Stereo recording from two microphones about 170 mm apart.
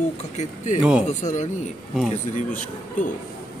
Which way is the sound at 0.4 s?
45° left (ahead or behind).